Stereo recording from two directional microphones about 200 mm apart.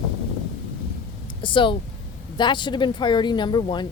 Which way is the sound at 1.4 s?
25° left (ahead or behind).